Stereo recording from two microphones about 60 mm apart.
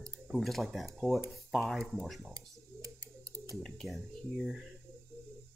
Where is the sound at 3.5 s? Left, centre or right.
Centre.